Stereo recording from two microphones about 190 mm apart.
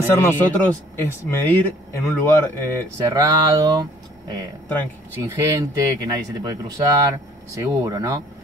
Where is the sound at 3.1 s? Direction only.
15° right (ahead or behind).